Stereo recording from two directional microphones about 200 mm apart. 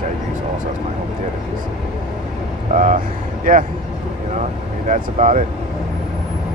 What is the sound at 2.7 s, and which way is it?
Speech, 40° right (ahead or behind).